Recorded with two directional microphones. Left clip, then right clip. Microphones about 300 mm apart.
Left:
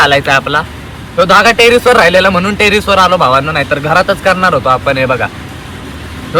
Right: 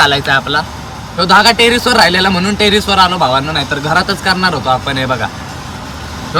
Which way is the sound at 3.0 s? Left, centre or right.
Centre.